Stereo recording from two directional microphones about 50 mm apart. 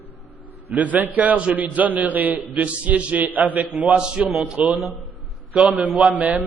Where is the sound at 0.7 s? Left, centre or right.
Right.